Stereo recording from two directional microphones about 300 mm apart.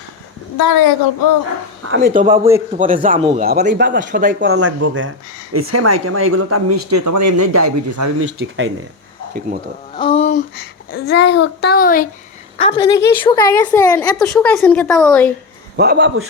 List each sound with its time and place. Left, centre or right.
0.5 s a woman's voice: left
1.8 s speech: right
4.6 s speech: right
6.9 s speech: right
8.3 s a man's voice: right
9.9 s a child's voice: centre
12.5 s a woman's voice: centre
15.7 s a man's voice: right